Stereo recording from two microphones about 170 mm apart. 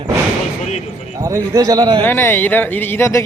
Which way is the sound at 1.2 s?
15° right (ahead or behind).